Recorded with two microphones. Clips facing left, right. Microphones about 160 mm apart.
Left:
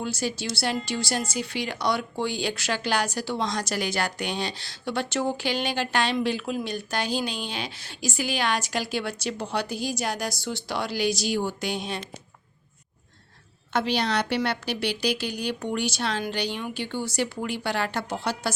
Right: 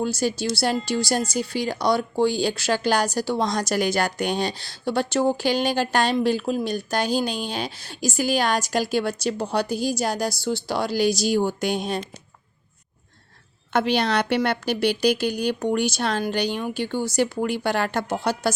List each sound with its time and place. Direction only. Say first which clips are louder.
0.0 s a woman's voice: right 6 dB; 40° right (ahead or behind)
13.7 s a woman's voice: right 4 dB; 55° right (ahead or behind)